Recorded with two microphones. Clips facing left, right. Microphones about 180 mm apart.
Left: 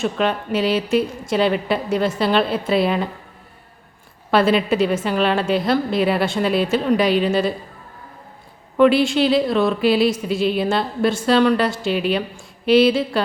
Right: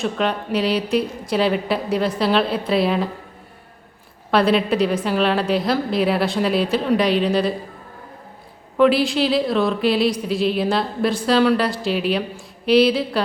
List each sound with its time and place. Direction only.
0.0 s speech: centre (ahead or behind)
4.3 s speech: centre (ahead or behind)
8.8 s speech: centre (ahead or behind)